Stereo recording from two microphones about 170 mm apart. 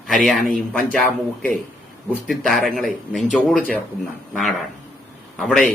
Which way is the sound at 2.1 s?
Centre (ahead or behind).